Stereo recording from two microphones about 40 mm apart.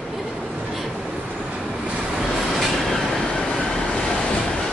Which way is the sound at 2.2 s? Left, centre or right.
Centre.